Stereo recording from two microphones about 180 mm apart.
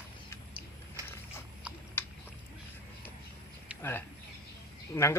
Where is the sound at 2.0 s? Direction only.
15° left (ahead or behind).